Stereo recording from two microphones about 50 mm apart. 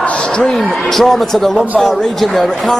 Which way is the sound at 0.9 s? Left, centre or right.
Centre.